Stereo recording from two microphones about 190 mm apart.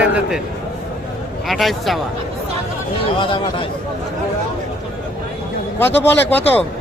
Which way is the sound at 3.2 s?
25° left (ahead or behind).